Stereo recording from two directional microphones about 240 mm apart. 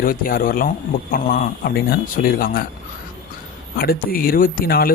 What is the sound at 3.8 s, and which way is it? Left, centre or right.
Speech, left.